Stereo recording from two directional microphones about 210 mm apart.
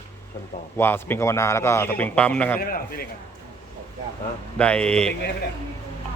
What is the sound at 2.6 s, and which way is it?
Speech, 45° left (ahead or behind).